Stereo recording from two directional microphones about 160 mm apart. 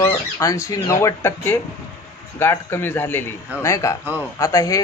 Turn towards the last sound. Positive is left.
turn(degrees=20)  # may be behind; listen again after turning